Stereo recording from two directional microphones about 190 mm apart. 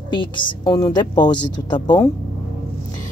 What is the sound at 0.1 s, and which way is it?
A woman's voice, 25° left (ahead or behind).